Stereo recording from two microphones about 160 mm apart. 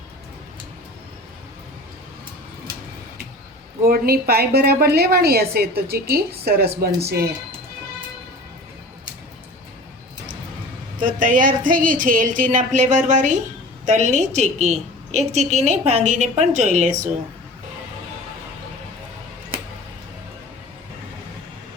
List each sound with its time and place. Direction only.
3.8 s a woman's voice: 70° right (ahead or behind)
11.0 s a woman's voice: 55° right (ahead or behind)